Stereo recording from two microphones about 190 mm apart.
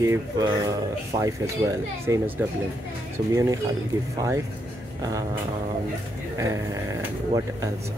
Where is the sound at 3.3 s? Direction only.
15° right (ahead or behind).